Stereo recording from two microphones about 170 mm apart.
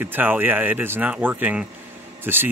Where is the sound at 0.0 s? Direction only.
10° right (ahead or behind).